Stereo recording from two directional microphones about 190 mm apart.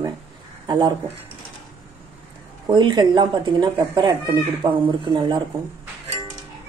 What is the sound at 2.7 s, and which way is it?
Speech, 25° right (ahead or behind).